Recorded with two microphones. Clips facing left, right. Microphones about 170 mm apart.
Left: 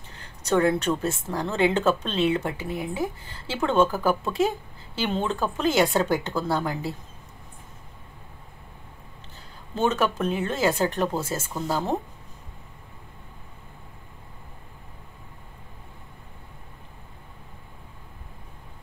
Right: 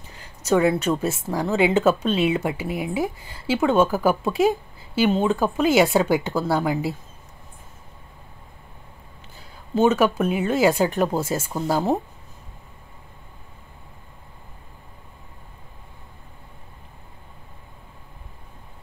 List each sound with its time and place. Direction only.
0.2 s speech: 10° right (ahead or behind)
9.8 s speech: 10° right (ahead or behind)